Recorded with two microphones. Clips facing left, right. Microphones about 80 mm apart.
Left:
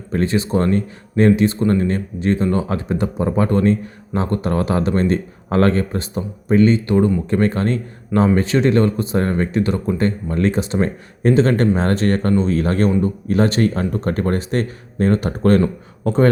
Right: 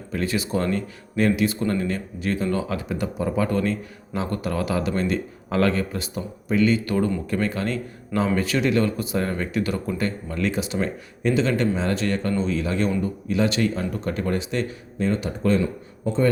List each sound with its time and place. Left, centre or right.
0.1 s speech: left
7.3 s speech: left